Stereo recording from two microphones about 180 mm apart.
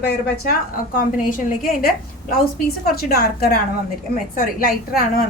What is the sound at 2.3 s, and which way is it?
A woman's voice, 60° left (ahead or behind).